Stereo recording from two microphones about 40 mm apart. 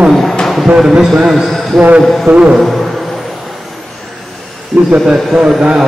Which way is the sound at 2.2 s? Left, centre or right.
Right.